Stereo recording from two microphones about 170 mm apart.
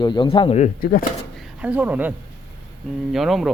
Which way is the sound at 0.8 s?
55° left (ahead or behind).